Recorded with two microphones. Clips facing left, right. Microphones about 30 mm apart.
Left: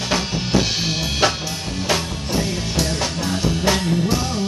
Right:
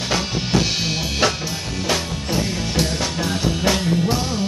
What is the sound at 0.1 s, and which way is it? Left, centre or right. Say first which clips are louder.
Drum kit: left 1 dB; centre.